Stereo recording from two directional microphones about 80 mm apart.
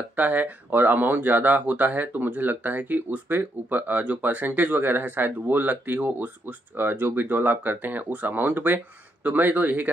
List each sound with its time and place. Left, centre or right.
0.1 s speech: centre